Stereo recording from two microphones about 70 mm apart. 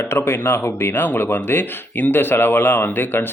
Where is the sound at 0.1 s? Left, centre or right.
Left.